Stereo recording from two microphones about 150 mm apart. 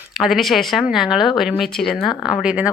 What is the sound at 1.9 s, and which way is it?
Speech, 30° left (ahead or behind).